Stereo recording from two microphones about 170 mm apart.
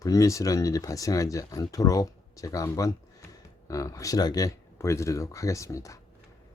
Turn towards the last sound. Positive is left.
turn(degrees=20)  # may be behind; listen again after turning